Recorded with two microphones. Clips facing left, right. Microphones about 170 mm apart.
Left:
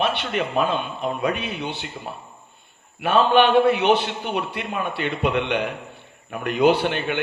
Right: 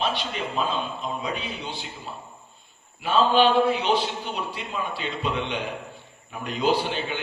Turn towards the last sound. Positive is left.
turn(degrees=65)  # may be behind; listen again after turning